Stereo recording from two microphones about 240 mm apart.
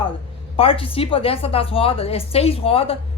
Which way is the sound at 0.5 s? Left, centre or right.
Left.